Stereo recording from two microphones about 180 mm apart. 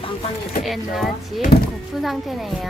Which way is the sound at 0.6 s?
Centre (ahead or behind).